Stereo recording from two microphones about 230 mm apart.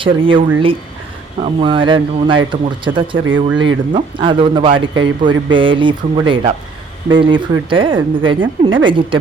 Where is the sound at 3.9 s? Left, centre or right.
Right.